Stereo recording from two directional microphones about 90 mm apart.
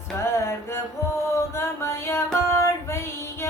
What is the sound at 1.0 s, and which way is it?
Music, 30° left (ahead or behind).